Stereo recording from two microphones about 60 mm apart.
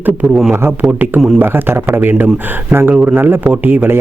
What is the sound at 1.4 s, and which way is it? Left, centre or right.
Speech, right.